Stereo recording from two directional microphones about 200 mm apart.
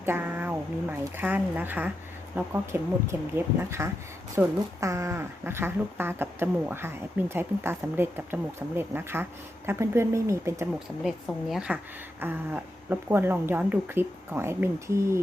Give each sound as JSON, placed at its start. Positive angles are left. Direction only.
{"t": 0.0, "sound": "speech", "side_deg": -10}
{"t": 11.0, "sound": "a woman's voice", "side_deg": 0}